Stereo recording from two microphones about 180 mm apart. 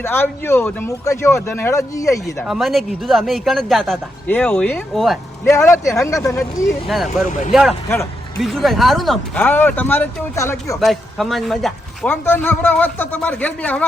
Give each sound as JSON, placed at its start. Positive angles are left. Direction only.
{"t": 0.0, "sound": "speech", "side_deg": 10}
{"t": 2.4, "sound": "a man's voice", "side_deg": 0}
{"t": 5.5, "sound": "speech", "side_deg": 15}
{"t": 6.8, "sound": "a man's voice", "side_deg": 0}
{"t": 8.4, "sound": "speech", "side_deg": 0}
{"t": 10.8, "sound": "speech", "side_deg": 0}
{"t": 12.2, "sound": "speech", "side_deg": 10}